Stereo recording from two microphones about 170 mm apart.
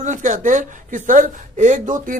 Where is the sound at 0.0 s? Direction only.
45° right (ahead or behind).